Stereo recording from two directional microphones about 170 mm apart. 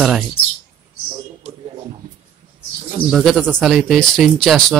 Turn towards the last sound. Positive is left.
turn(degrees=0)  # may be behind; listen again after turning